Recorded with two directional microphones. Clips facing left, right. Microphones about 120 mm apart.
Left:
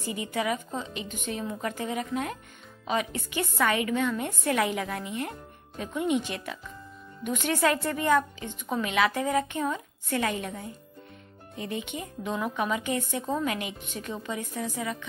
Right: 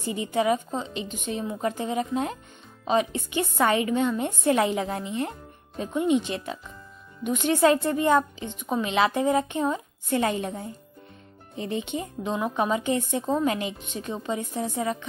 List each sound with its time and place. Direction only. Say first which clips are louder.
0.0 s speech: right 5 dB; 25° right (ahead or behind)